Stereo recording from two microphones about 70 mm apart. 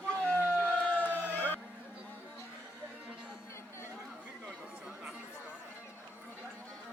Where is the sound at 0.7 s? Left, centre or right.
Left.